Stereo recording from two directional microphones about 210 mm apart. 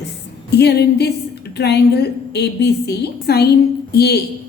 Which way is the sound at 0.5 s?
50° left (ahead or behind).